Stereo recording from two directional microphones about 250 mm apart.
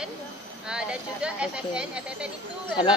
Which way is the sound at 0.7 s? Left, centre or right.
Centre.